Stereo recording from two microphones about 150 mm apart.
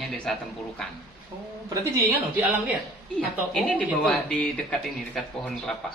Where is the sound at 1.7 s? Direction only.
20° right (ahead or behind).